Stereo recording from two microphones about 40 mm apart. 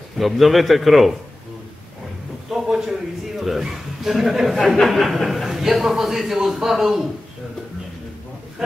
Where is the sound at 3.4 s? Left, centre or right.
Centre.